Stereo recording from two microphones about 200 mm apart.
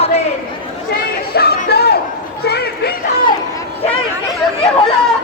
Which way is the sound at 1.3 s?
55° left (ahead or behind).